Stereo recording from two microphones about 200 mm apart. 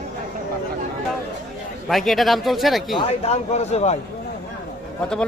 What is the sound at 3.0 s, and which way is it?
Speech, 30° left (ahead or behind).